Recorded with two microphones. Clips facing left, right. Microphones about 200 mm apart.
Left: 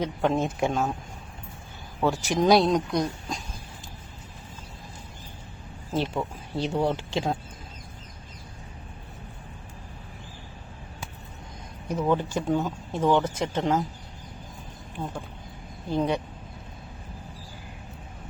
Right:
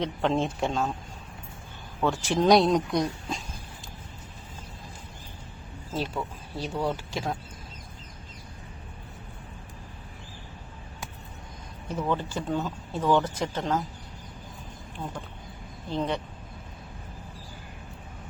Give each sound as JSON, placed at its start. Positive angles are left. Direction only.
{"t": 0.0, "sound": "speech", "side_deg": 5}
{"t": 2.2, "sound": "speech", "side_deg": 10}
{"t": 2.6, "sound": "a woman's voice", "side_deg": 0}
{"t": 5.9, "sound": "speech", "side_deg": 20}
{"t": 11.9, "sound": "speech", "side_deg": 15}
{"t": 15.9, "sound": "speech", "side_deg": 10}